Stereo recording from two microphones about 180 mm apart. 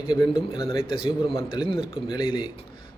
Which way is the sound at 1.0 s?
30° left (ahead or behind).